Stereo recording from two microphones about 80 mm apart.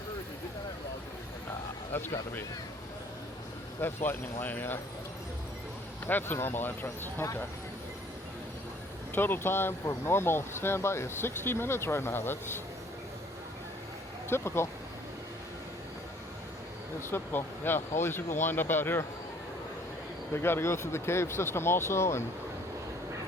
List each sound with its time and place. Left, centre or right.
1.9 s speech: left
3.8 s speech: left
6.1 s speech: left
9.1 s speech: left
14.3 s speech: left
17.1 s speech: left
20.3 s speech: left